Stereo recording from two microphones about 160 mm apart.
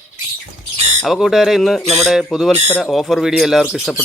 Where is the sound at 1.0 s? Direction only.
Centre (ahead or behind).